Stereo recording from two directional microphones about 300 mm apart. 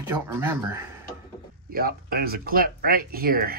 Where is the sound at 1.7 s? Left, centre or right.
Right.